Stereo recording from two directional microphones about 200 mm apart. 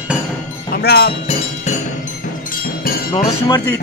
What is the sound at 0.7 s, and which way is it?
Speech, 50° left (ahead or behind).